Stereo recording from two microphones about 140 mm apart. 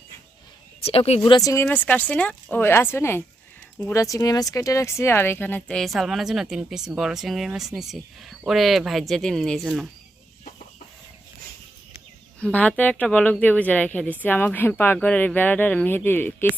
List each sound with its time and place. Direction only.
0.8 s a woman's voice: 45° left (ahead or behind)
1.4 s speech: 25° left (ahead or behind)
1.6 s speech: 10° left (ahead or behind)
12.4 s speech: 10° left (ahead or behind)